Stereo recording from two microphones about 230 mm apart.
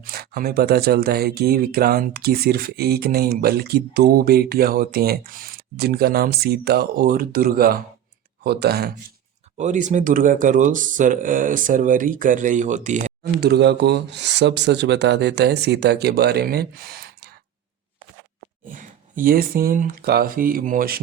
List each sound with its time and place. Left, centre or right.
0.0 s speech: right
9.6 s speech: right
13.4 s speech: right
18.7 s speech: right